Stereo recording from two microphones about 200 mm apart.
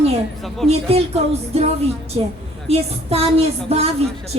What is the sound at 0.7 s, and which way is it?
Speech, 30° right (ahead or behind).